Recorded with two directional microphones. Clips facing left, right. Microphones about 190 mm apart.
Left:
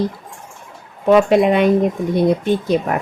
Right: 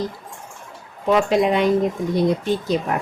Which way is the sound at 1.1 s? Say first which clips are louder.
Left 5 dB; 60° left (ahead or behind).